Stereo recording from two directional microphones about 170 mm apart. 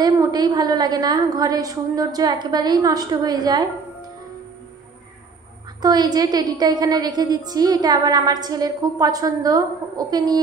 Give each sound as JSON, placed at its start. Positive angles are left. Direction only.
{"t": 0.0, "sound": "a woman's voice", "side_deg": -25}
{"t": 5.8, "sound": "a woman's voice", "side_deg": -25}